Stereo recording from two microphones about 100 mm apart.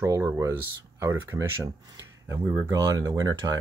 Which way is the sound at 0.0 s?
30° right (ahead or behind).